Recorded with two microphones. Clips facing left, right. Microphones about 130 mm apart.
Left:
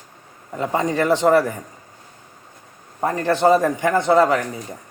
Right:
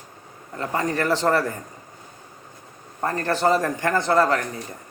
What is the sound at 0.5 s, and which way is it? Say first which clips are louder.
A man's voice: left 4 dB; 15° left (ahead or behind).